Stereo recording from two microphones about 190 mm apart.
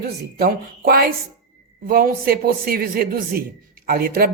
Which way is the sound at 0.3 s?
55° right (ahead or behind).